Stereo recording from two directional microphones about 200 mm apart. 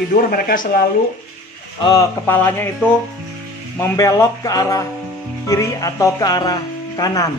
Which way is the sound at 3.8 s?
15° left (ahead or behind).